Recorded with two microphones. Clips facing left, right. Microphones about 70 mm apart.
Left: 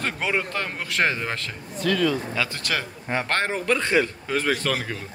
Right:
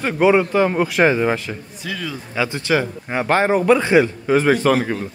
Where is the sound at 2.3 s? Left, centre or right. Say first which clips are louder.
Right 8 dB; centre.